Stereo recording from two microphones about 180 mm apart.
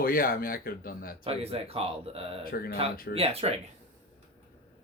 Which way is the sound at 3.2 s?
35° right (ahead or behind).